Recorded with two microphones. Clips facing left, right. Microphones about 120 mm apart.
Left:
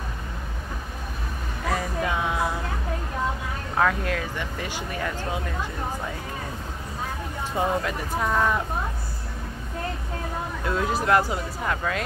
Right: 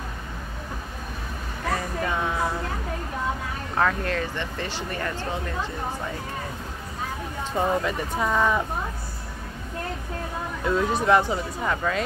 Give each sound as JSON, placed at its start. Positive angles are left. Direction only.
{"t": 1.7, "sound": "a sound", "side_deg": 5}
{"t": 3.7, "sound": "speech", "side_deg": 5}
{"t": 7.5, "sound": "speech", "side_deg": 0}
{"t": 10.6, "sound": "speech", "side_deg": 0}